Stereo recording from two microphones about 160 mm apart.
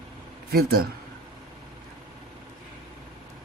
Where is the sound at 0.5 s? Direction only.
75° right (ahead or behind).